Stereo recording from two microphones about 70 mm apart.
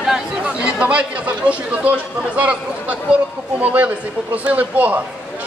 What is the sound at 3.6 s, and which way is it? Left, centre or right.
Speech, right.